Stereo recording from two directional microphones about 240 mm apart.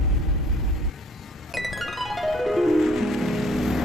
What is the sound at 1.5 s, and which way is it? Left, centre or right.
Music, centre.